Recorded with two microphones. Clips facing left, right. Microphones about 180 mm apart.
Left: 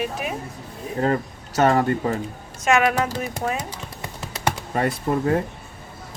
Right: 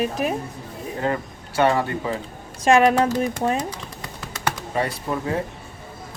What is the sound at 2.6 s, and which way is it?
Speech, 30° right (ahead or behind).